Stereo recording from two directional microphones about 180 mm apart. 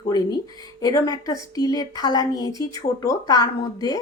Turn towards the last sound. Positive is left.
turn(degrees=20)  # may be behind; listen again after turning